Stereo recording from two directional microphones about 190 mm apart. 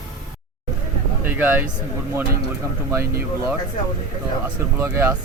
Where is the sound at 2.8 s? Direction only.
15° right (ahead or behind).